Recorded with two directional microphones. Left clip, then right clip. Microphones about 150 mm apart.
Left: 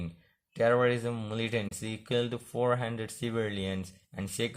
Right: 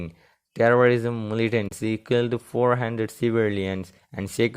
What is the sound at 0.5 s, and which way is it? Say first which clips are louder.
Speech: right 8 dB; 40° right (ahead or behind).